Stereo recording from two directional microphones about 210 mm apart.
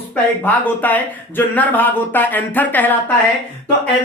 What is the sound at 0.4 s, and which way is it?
Speech, 10° left (ahead or behind).